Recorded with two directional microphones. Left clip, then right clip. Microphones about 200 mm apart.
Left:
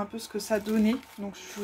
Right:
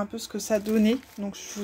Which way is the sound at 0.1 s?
40° right (ahead or behind).